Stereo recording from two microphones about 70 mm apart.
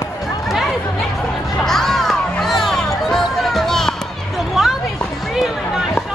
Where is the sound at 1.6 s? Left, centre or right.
Centre.